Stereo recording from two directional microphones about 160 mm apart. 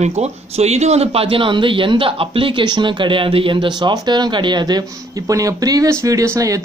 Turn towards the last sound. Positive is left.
turn(degrees=-20)  # may be behind; listen again after turning